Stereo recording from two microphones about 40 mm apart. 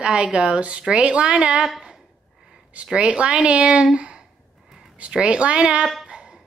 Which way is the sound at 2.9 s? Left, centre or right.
Centre.